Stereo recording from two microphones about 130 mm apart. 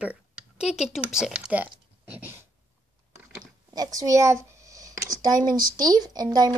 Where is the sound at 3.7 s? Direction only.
30° right (ahead or behind).